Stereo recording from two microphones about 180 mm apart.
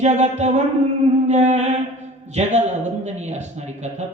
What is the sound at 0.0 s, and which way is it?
Speech, 40° right (ahead or behind).